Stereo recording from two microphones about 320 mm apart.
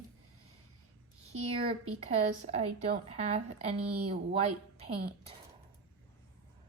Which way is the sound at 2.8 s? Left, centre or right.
Centre.